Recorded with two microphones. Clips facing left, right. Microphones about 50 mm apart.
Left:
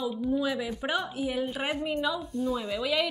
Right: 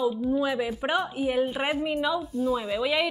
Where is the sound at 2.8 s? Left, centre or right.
Centre.